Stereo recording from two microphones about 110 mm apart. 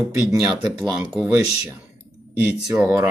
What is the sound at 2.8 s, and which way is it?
Speech, 20° right (ahead or behind).